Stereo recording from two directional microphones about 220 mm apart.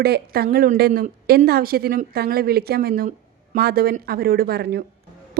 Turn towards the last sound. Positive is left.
turn(degrees=-45)  # may be behind; listen again after turning